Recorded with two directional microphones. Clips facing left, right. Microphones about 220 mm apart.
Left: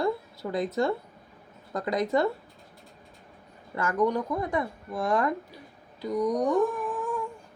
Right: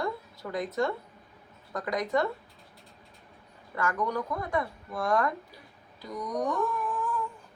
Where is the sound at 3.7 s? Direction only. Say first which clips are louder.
Left 5 dB; 25° left (ahead or behind).